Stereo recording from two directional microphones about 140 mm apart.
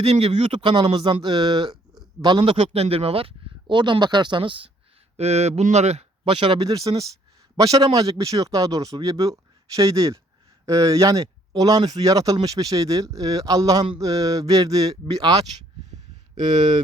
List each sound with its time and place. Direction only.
0.0 s speech: 45° right (ahead or behind)
0.6 s a man's voice: 35° right (ahead or behind)
5.1 s speech: 50° right (ahead or behind)
6.6 s speech: 25° right (ahead or behind)